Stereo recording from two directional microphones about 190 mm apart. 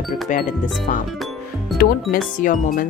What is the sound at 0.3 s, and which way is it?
Music, 45° left (ahead or behind).